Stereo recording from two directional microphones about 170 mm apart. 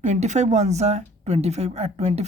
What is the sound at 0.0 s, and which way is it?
A woman's voice, 45° right (ahead or behind).